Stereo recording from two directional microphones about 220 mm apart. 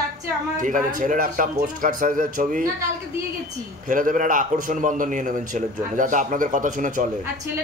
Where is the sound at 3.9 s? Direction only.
35° right (ahead or behind).